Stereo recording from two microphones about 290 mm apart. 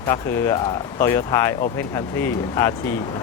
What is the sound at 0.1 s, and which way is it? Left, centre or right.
Speech, centre.